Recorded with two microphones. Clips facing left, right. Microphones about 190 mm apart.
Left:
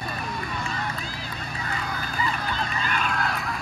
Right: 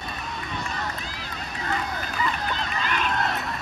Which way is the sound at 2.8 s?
45° left (ahead or behind).